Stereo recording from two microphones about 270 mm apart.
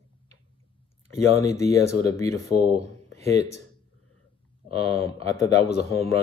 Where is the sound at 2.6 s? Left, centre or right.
Right.